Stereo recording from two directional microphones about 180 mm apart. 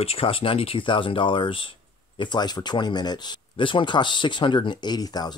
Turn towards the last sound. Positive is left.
turn(degrees=20)  # may be behind; listen again after turning